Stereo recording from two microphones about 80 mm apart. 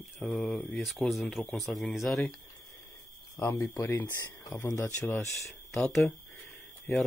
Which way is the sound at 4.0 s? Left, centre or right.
Left.